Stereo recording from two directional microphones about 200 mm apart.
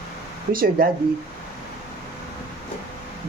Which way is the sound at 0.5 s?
45° right (ahead or behind).